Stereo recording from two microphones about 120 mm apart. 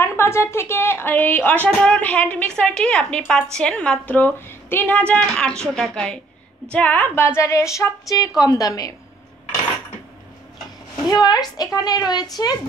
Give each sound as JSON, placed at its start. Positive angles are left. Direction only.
{"t": 0.0, "sound": "a woman's voice", "side_deg": 20}
{"t": 11.1, "sound": "a woman's voice", "side_deg": 35}